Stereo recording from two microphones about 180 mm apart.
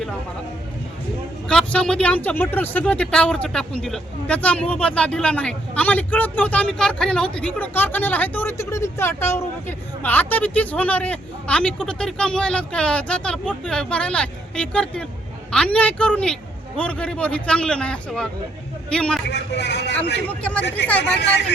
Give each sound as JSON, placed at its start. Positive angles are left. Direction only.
{"t": 1.5, "sound": "a man's voice", "side_deg": 5}
{"t": 19.3, "sound": "a man's voice", "side_deg": 75}
{"t": 20.2, "sound": "speech", "side_deg": 5}